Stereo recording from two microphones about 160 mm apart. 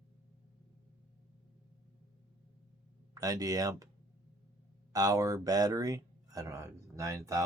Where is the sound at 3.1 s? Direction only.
25° right (ahead or behind).